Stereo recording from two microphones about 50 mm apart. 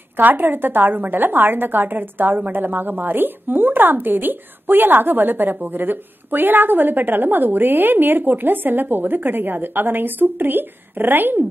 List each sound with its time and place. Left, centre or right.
0.2 s a woman's voice: right